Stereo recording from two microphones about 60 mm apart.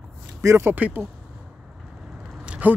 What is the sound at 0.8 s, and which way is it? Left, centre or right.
Speech, right.